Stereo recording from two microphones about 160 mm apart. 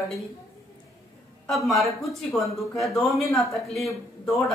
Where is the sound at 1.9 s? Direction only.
Centre (ahead or behind).